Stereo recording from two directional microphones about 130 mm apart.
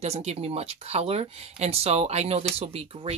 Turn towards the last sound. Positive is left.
turn(degrees=-50)  # may be behind; listen again after turning